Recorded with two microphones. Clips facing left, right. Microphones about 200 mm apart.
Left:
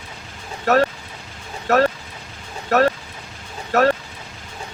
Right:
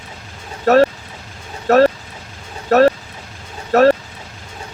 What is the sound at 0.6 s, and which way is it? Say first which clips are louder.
Speech: right 6 dB; 35° right (ahead or behind).